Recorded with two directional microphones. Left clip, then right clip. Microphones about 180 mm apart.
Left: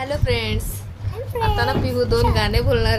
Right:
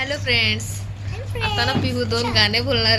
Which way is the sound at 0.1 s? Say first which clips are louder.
Right 5 dB; 15° left (ahead or behind).